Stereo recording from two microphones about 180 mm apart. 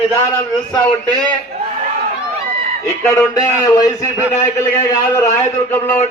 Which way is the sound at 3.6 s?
20° left (ahead or behind).